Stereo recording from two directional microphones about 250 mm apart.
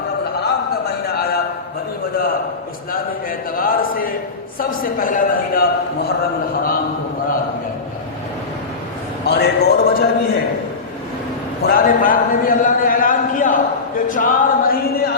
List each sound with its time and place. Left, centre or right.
1.0 s a sound: left
2.9 s choir: left
4.6 s a man's voice: left
9.2 s a man's voice: left
11.6 s a sound: left
14.1 s music: left